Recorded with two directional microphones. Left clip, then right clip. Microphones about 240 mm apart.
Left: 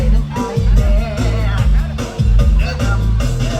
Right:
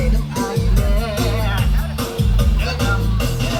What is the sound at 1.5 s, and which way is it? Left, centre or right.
Music, right.